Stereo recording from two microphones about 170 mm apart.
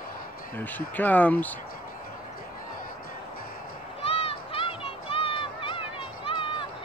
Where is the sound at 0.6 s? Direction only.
10° left (ahead or behind).